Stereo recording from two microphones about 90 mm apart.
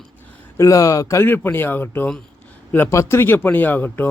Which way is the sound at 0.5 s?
40° left (ahead or behind).